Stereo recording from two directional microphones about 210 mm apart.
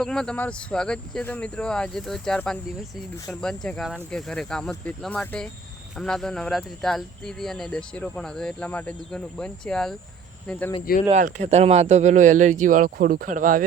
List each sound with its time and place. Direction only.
0.0 s speech: 5° left (ahead or behind)
11.1 s speech: 35° right (ahead or behind)